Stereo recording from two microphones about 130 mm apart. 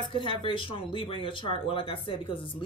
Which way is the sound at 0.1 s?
40° left (ahead or behind).